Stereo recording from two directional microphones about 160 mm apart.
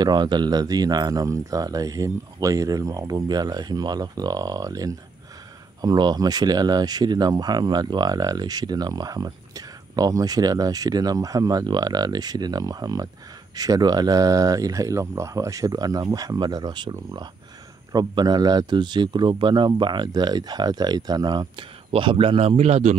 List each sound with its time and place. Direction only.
0.0 s speech: 25° right (ahead or behind); by 22.9 s 45° right (ahead or behind)